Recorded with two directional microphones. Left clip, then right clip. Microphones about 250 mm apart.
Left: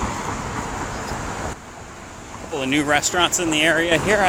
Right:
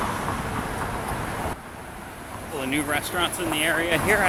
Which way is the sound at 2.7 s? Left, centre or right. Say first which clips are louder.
Left 7 dB; left.